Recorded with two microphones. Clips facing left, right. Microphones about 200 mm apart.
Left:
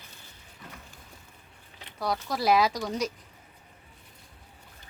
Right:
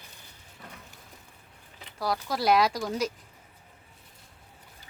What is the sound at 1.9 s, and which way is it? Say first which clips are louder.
Speech: even; centre (ahead or behind).